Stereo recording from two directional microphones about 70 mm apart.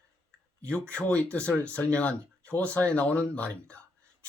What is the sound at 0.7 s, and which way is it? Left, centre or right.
Speech, centre.